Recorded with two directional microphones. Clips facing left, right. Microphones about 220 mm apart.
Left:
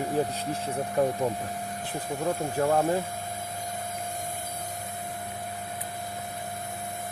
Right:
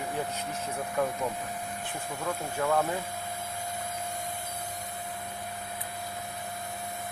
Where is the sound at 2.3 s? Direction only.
35° left (ahead or behind).